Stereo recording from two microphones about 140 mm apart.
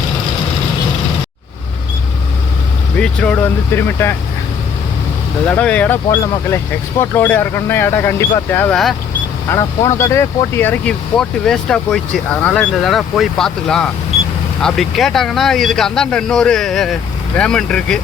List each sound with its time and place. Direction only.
3.0 s speech: 10° left (ahead or behind)
5.5 s speech: 10° left (ahead or behind)
7.0 s speech: 15° left (ahead or behind)
8.7 s speech: centre (ahead or behind)
9.5 s speech: 20° left (ahead or behind); by 18.0 s 5° left (ahead or behind)